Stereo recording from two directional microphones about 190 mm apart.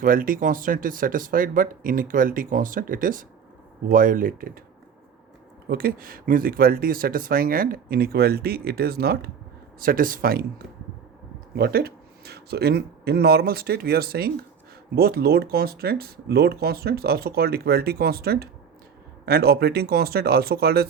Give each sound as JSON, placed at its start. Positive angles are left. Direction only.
{"t": 0.0, "sound": "speech", "side_deg": -45}
{"t": 5.6, "sound": "speech", "side_deg": -50}
{"t": 11.5, "sound": "speech", "side_deg": -55}